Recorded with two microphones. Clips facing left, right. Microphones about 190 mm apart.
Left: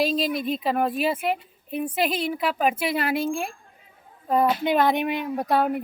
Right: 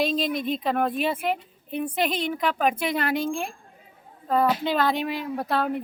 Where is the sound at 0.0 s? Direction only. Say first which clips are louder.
Left 1 dB; 5° left (ahead or behind).